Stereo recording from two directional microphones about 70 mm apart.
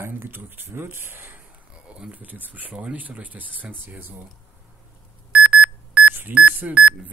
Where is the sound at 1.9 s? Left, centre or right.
Centre.